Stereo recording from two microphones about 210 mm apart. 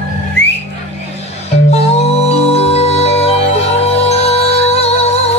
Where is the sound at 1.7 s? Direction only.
30° left (ahead or behind).